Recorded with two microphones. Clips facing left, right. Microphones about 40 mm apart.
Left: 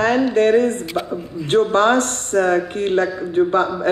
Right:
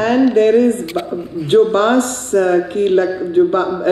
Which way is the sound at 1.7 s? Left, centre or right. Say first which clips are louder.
Right 2 dB; left.